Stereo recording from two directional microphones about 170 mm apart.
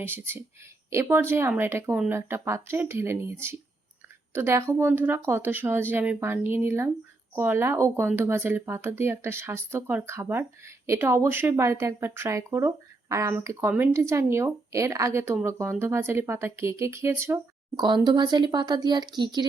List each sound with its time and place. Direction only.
0.0 s speech: 15° right (ahead or behind)